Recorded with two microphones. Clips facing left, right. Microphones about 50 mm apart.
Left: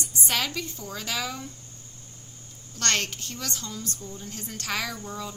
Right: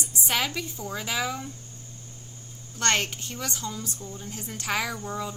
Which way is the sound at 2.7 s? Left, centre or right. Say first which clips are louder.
Right 2 dB; centre.